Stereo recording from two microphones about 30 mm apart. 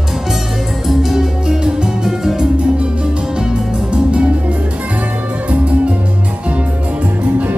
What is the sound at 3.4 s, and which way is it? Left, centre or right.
Music, right.